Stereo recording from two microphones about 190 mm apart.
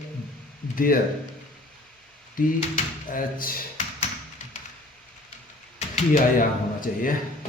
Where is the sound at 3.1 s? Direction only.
45° left (ahead or behind).